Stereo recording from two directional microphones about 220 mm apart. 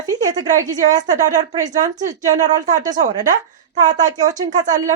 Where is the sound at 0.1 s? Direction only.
15° right (ahead or behind).